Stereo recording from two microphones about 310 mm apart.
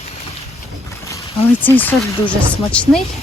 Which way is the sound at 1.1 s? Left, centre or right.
Centre.